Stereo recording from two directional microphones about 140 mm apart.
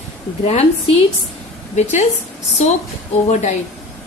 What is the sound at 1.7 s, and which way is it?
Speech, 55° left (ahead or behind).